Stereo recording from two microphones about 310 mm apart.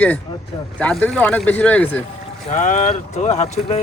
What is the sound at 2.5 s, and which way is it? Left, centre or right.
Speech, left.